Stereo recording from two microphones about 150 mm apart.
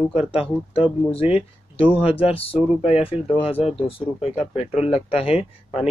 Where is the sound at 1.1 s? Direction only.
40° left (ahead or behind).